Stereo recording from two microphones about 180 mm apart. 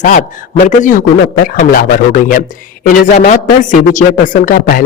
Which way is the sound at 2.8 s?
50° left (ahead or behind).